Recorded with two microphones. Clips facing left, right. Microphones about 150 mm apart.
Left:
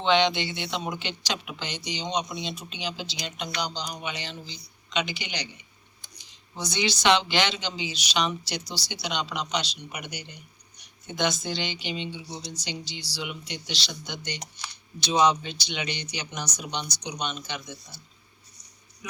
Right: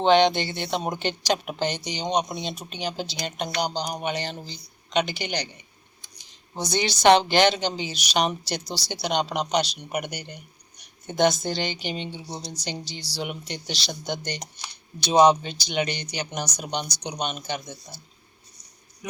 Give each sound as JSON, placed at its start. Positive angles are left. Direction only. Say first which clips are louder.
{"t": 0.0, "sound": "speech", "louder": "right 4 dB", "side_deg": -45}
{"t": 6.5, "sound": "a woman's voice", "louder": "right 3 dB", "side_deg": -45}